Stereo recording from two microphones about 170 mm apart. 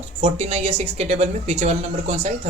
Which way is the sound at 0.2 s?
35° right (ahead or behind).